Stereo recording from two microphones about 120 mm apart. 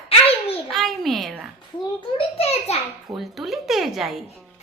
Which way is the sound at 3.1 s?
Centre (ahead or behind).